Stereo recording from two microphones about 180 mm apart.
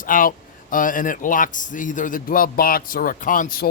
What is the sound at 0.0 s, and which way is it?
Speech, 50° left (ahead or behind).